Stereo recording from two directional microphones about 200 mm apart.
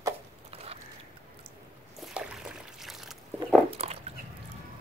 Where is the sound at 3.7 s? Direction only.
30° right (ahead or behind).